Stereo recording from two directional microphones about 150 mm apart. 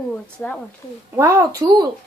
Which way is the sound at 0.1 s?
10° left (ahead or behind).